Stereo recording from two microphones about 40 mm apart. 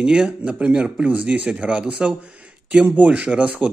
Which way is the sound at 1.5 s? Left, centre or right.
Right.